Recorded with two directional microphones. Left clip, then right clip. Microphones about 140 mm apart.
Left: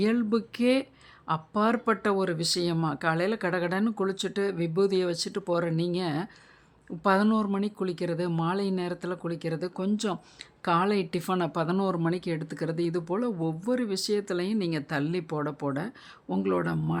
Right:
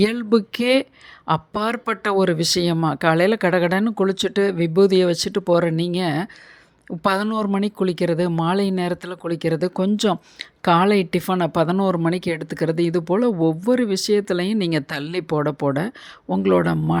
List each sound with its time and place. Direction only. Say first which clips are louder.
0.0 s speech: right 8 dB; 45° right (ahead or behind)